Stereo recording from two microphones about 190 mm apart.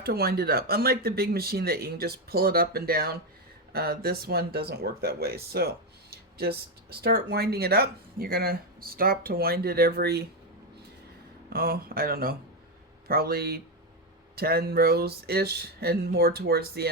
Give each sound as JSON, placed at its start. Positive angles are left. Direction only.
{"t": 0.0, "sound": "speech", "side_deg": -55}
{"t": 11.4, "sound": "speech", "side_deg": -50}